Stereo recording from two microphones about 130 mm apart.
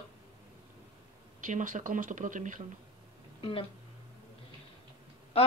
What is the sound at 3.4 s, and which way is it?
Speech, 40° left (ahead or behind).